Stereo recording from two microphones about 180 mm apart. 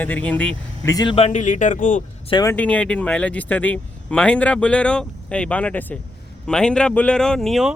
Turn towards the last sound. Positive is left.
turn(degrees=0)  # may be behind; listen again after turning